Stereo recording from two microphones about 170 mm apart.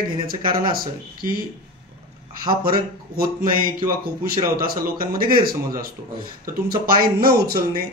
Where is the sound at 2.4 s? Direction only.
60° right (ahead or behind).